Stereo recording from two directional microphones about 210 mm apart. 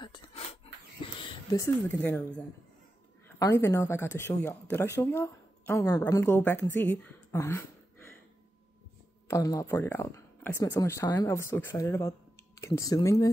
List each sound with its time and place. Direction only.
0.0 s a sound: 20° left (ahead or behind)
1.2 s speech: 20° left (ahead or behind)
9.3 s speech: 15° left (ahead or behind)